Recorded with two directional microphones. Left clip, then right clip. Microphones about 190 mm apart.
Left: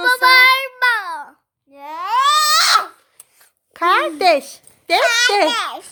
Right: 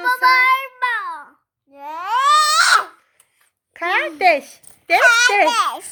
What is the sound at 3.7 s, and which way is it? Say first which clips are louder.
Speech: left 4 dB; 25° left (ahead or behind).